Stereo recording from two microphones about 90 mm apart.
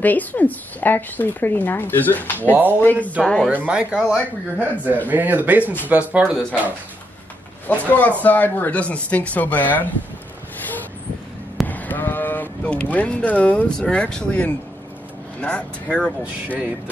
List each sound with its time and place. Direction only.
0.0 s a woman's voice: 20° left (ahead or behind)
3.4 s speech: 10° right (ahead or behind)
7.6 s a woman's voice: 20° left (ahead or behind)
11.6 s speech: 20° left (ahead or behind)
16.4 s speech: 15° right (ahead or behind)